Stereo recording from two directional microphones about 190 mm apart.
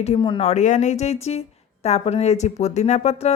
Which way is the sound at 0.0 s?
30° left (ahead or behind).